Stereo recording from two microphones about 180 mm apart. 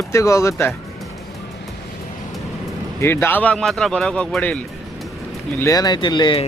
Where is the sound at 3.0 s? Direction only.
10° left (ahead or behind).